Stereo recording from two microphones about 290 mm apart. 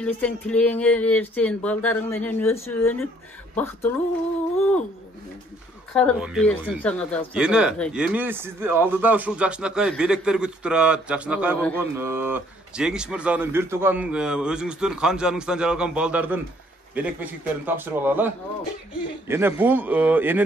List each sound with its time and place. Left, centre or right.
0.0 s speech: centre
5.9 s a man's voice: centre